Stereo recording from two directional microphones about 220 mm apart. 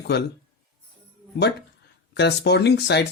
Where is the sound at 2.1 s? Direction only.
50° left (ahead or behind).